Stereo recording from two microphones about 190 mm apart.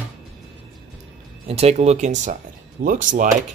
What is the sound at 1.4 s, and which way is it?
Speech, 35° right (ahead or behind).